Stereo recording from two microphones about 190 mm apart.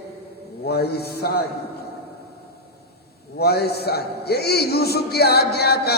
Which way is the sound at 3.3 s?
55° left (ahead or behind).